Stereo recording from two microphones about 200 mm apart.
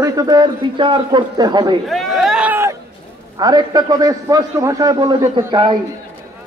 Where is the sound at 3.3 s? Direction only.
20° right (ahead or behind).